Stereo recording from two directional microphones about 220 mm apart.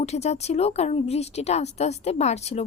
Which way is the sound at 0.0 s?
30° left (ahead or behind).